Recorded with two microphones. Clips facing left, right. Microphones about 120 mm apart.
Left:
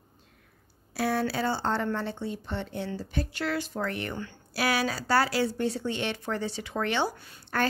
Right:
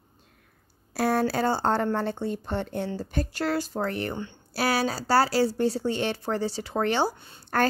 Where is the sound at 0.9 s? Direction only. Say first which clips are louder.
Right 4 dB; 45° right (ahead or behind); by 7.4 s 30° right (ahead or behind).